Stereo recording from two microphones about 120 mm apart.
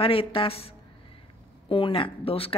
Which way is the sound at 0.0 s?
50° left (ahead or behind).